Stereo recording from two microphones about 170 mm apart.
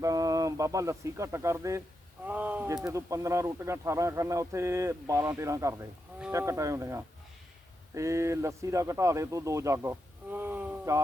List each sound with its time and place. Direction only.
0.0 s speech: 20° right (ahead or behind)